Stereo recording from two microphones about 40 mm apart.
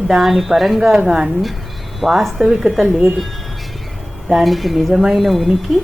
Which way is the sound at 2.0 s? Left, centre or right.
Centre.